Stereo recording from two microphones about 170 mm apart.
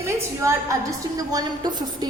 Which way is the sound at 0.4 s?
20° right (ahead or behind).